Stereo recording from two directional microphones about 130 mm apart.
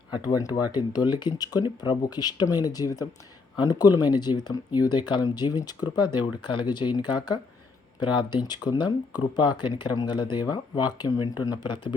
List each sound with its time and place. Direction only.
0.1 s speech: 30° left (ahead or behind)